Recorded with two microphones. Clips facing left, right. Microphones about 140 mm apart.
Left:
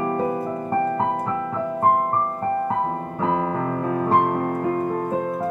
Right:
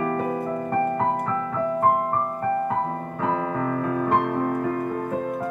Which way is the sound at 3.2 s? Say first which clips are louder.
Left 2 dB; 30° left (ahead or behind).